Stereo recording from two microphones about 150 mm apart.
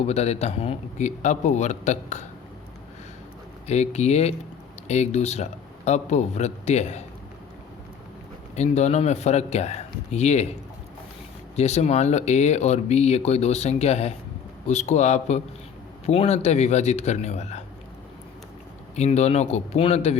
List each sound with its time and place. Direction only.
0.0 s speech: 45° left (ahead or behind)
3.7 s speech: 45° left (ahead or behind)
8.5 s speech: 50° left (ahead or behind)
11.5 s speech: 45° left (ahead or behind)
18.9 s speech: 45° left (ahead or behind)